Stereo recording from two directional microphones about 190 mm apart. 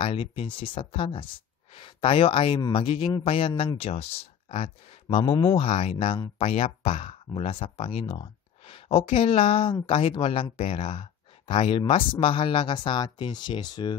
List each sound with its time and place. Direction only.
0.0 s speech: 30° left (ahead or behind)
5.7 s speech: 35° left (ahead or behind)